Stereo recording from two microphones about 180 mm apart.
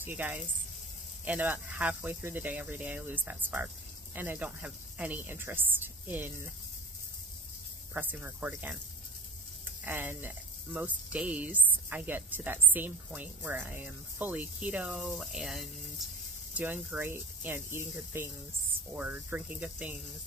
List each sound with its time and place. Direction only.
0.0 s speech: 10° right (ahead or behind)
7.9 s speech: 10° right (ahead or behind)
9.8 s speech: 10° right (ahead or behind)